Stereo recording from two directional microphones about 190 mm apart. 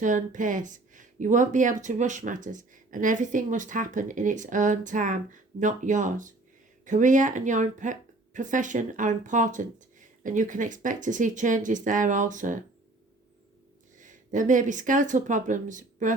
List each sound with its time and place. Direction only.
0.0 s speech: 40° right (ahead or behind)
14.0 s speech: 40° right (ahead or behind)